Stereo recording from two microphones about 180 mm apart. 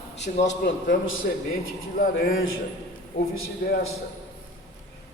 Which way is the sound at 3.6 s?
65° left (ahead or behind).